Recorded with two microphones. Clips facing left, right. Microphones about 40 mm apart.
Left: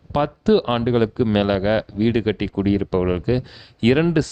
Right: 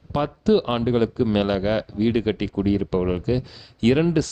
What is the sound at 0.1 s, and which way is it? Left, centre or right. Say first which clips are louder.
Speech: left 3 dB; left.